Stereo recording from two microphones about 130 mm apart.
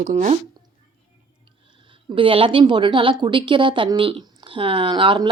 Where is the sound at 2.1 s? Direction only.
45° right (ahead or behind).